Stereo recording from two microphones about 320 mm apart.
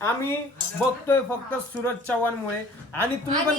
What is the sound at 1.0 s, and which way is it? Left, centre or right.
Speech, centre.